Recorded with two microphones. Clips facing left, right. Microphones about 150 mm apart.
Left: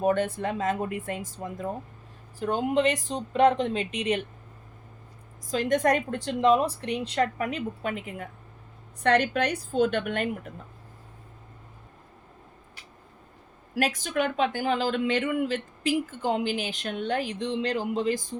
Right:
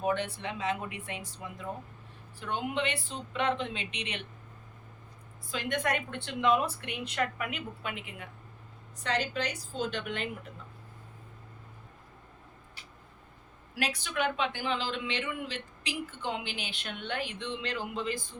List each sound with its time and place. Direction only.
0.0 s a woman's voice: 45° left (ahead or behind)
5.5 s a woman's voice: 40° left (ahead or behind)
9.0 s a woman's voice: 60° left (ahead or behind)
13.7 s speech: 45° left (ahead or behind)